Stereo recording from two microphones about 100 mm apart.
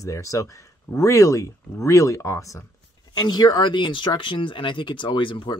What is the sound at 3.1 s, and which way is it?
Speech, 45° left (ahead or behind).